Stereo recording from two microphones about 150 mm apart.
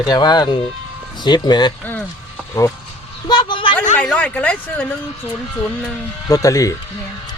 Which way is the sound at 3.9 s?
10° left (ahead or behind).